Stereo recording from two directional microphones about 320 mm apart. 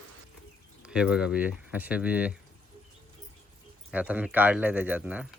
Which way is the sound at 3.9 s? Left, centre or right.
Centre.